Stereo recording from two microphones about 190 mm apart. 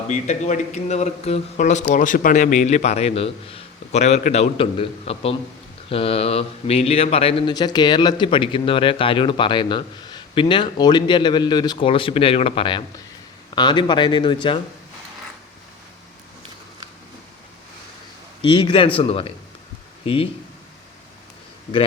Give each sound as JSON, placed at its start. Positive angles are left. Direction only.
{"t": 0.1, "sound": "a man's voice", "side_deg": 40}
{"t": 18.4, "sound": "speech", "side_deg": 25}